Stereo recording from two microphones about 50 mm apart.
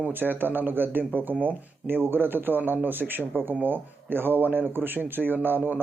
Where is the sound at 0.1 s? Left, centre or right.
Right.